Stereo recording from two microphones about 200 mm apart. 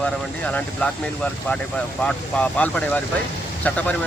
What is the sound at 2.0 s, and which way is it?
Speech, 5° left (ahead or behind).